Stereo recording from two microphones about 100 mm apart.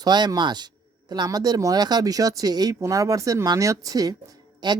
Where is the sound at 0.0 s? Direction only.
45° right (ahead or behind).